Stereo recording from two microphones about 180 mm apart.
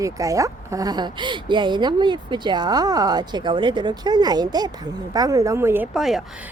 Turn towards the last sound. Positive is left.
turn(degrees=0)  # may be behind; listen again after turning